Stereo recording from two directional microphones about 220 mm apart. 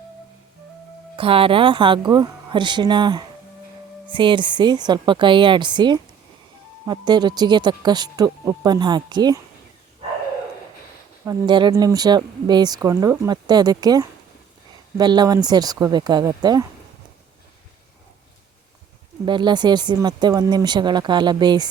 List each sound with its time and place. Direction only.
1.1 s speech: 25° right (ahead or behind)
11.3 s speech: 20° right (ahead or behind)
19.2 s speech: 20° right (ahead or behind)